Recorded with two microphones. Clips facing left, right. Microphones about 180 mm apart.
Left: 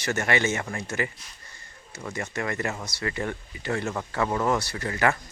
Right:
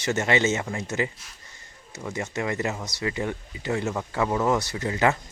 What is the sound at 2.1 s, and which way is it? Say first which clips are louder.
Speech: right 2 dB; 20° right (ahead or behind).